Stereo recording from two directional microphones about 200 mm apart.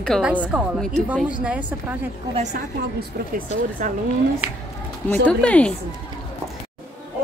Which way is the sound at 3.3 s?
40° right (ahead or behind).